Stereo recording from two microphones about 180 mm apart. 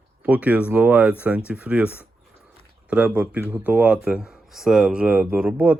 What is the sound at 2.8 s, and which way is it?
Speech, 5° right (ahead or behind).